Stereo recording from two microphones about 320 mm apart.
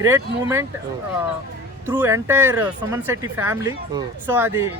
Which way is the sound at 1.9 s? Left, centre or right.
Centre.